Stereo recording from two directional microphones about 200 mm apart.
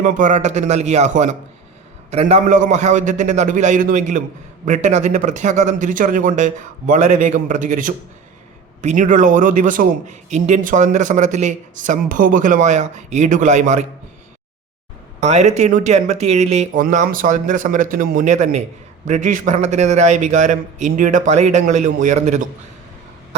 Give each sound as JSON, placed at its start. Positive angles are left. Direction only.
{"t": 0.0, "sound": "a man's voice", "side_deg": -40}
{"t": 15.2, "sound": "a man's voice", "side_deg": -35}